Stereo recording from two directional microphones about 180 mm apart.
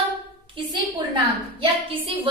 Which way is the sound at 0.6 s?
30° right (ahead or behind).